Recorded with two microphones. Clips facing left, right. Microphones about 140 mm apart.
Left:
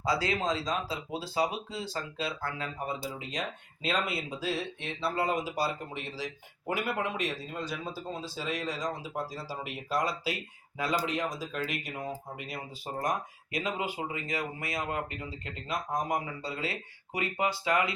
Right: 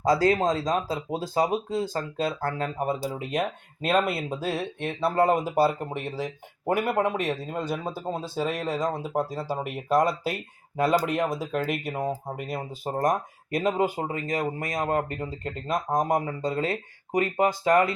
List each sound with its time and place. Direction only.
0.0 s speech: 45° right (ahead or behind)